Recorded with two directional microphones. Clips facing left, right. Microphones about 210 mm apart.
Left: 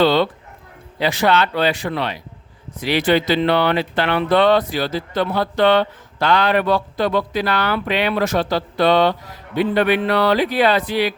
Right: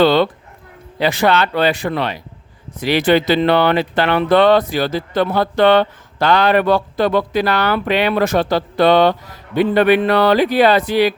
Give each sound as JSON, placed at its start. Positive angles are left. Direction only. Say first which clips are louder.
{"t": 0.0, "sound": "dog", "louder": "right 3 dB", "side_deg": -55}
{"t": 0.9, "sound": "speech", "louder": "right 2 dB", "side_deg": -55}